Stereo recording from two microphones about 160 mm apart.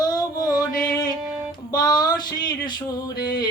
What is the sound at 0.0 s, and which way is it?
Music, 25° left (ahead or behind).